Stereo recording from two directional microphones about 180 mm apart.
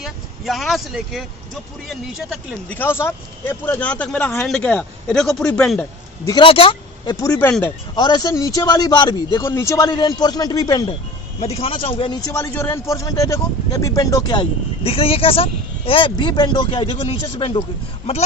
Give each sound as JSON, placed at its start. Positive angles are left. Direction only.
{"t": 0.0, "sound": "speech", "side_deg": 0}
{"t": 2.7, "sound": "speech", "side_deg": 10}
{"t": 6.2, "sound": "a man's voice", "side_deg": 25}
{"t": 11.3, "sound": "a man's voice", "side_deg": 35}
{"t": 14.8, "sound": "a woman's voice", "side_deg": 30}